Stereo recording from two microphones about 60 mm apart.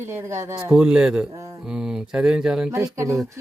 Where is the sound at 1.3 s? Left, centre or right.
Right.